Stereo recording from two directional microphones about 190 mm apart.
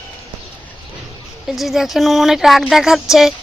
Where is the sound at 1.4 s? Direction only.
Centre (ahead or behind).